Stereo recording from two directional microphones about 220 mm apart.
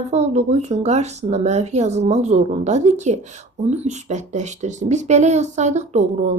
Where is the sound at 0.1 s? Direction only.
30° right (ahead or behind).